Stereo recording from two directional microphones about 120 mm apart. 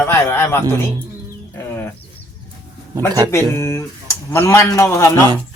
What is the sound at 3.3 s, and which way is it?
Speech, 20° left (ahead or behind).